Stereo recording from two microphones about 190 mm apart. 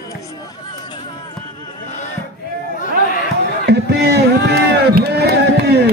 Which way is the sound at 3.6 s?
60° right (ahead or behind).